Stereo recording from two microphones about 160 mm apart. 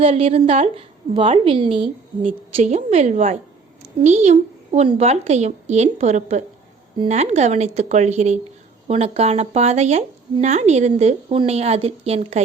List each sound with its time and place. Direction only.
0.0 s a woman's voice: 40° right (ahead or behind)